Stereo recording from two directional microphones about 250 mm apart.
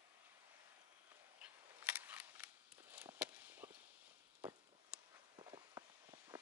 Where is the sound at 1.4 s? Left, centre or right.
Centre.